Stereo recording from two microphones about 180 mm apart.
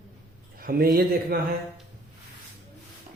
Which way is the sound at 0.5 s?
55° right (ahead or behind).